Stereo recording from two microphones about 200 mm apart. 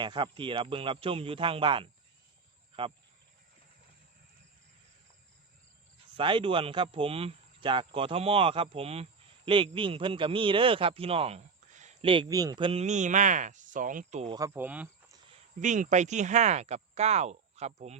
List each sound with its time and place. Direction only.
0.0 s a man's voice: 25° right (ahead or behind)
6.1 s a man's voice: 25° right (ahead or behind)
14.3 s speech: 15° right (ahead or behind)
15.6 s speech: 35° right (ahead or behind)